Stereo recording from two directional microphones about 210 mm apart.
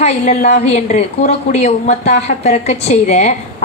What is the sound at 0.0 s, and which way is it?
A woman's voice, 30° left (ahead or behind).